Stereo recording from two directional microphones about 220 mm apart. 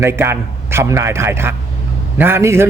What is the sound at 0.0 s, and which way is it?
A man's voice, 10° right (ahead or behind).